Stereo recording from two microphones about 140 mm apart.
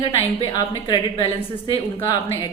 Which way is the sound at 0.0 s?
35° left (ahead or behind).